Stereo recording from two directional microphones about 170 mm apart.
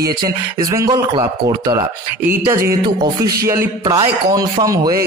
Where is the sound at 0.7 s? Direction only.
20° right (ahead or behind).